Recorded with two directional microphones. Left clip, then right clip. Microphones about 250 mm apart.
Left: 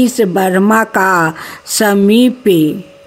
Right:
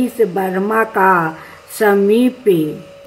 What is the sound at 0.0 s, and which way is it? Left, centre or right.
A woman's voice, left.